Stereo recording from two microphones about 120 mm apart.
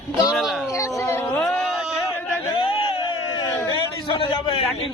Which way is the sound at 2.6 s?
50° left (ahead or behind).